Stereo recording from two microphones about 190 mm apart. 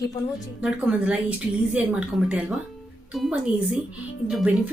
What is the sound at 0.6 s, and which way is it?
A woman's voice, 5° right (ahead or behind).